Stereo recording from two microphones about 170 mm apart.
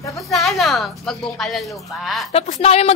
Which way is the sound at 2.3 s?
40° left (ahead or behind).